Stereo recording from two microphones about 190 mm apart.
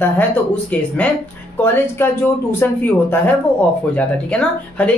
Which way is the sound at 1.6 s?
10° left (ahead or behind).